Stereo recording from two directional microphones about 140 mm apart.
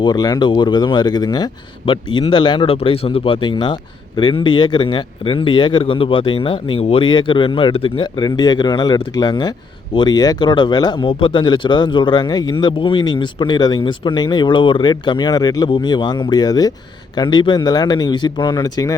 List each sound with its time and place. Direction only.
0.0 s speech: 30° left (ahead or behind)